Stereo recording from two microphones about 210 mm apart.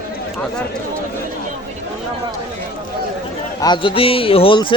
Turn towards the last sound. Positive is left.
turn(degrees=25)  # may be behind; listen again after turning